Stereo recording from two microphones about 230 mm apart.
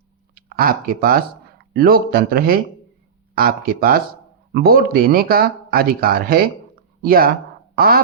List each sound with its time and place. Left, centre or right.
0.3 s speech: right